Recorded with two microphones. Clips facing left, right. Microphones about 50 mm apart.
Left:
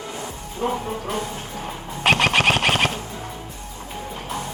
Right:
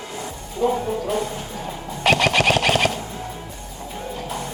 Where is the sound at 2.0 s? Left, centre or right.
Left.